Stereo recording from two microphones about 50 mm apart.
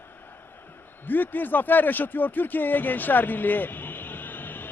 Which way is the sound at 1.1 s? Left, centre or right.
Left.